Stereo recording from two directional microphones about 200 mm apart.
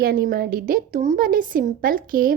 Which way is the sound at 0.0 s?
50° right (ahead or behind).